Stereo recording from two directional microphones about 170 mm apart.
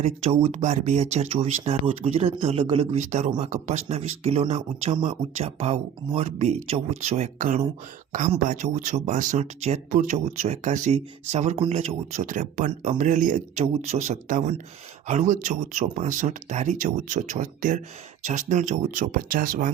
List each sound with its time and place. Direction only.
0.0 s speech: 35° right (ahead or behind); by 19.7 s 55° right (ahead or behind)